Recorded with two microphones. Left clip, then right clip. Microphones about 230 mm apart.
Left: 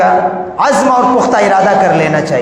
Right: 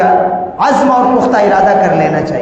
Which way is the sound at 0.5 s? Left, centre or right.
Left.